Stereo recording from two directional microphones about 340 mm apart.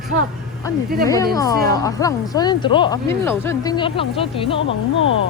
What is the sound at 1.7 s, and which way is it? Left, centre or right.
Speech, centre.